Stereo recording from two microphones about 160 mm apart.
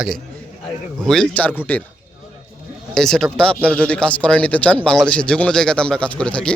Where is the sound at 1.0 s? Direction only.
5° left (ahead or behind).